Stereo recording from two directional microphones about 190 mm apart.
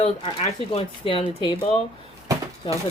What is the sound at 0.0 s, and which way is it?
A woman's voice, 25° left (ahead or behind).